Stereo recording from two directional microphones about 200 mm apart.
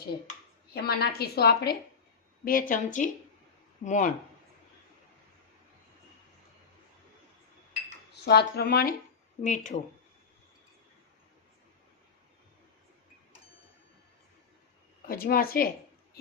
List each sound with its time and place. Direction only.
0.7 s a woman's voice: 50° left (ahead or behind)
8.1 s a woman's voice: 55° left (ahead or behind)
9.4 s speech: 40° left (ahead or behind)
15.0 s a woman's voice: 45° left (ahead or behind)
16.2 s a sound: 50° left (ahead or behind)